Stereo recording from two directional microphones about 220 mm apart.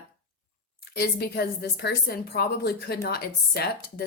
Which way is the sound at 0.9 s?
45° left (ahead or behind).